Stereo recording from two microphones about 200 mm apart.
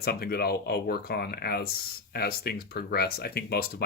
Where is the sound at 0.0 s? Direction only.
50° left (ahead or behind).